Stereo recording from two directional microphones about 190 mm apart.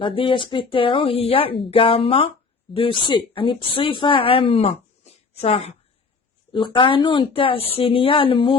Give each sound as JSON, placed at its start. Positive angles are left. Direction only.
{"t": 0.0, "sound": "a woman's voice", "side_deg": 25}